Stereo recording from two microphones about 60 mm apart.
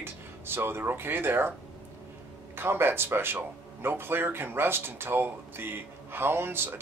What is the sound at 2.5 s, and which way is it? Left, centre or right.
Speech, right.